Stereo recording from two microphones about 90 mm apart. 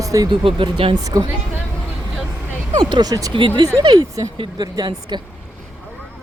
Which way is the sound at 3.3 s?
70° right (ahead or behind).